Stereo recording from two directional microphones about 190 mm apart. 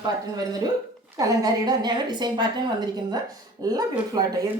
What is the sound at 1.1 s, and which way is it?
A woman's voice, 20° right (ahead or behind).